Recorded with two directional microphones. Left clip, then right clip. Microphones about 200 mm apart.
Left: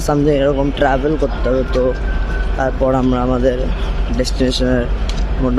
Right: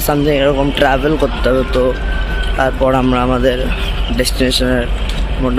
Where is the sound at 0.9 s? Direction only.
Centre (ahead or behind).